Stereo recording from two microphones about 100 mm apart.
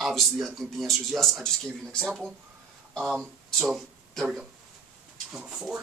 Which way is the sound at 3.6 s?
Centre (ahead or behind).